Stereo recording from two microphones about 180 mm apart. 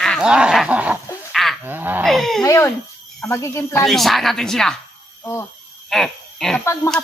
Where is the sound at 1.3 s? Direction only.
Centre (ahead or behind).